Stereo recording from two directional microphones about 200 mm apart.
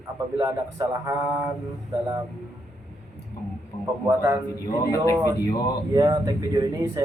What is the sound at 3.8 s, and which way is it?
Speech, 15° right (ahead or behind).